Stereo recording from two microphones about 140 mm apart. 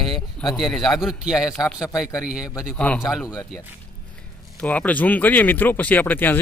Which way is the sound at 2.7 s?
10° left (ahead or behind).